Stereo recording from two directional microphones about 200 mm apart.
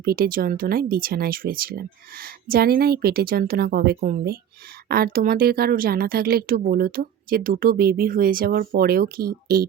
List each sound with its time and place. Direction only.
0.0 s a woman's voice: 50° right (ahead or behind)